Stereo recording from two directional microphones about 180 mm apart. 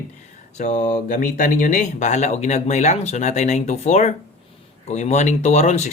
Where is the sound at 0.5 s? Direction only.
45° left (ahead or behind).